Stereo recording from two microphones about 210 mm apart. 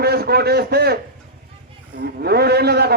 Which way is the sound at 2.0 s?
50° right (ahead or behind).